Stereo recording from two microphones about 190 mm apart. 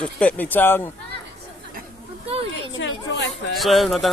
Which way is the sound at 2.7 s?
70° left (ahead or behind).